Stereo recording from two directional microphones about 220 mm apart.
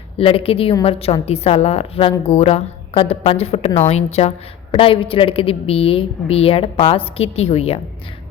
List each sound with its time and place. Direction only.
0.2 s a woman's voice: 25° left (ahead or behind)